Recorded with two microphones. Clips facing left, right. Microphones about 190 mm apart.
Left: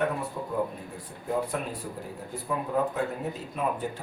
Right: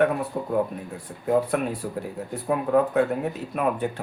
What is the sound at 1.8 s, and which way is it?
Speech, 65° right (ahead or behind).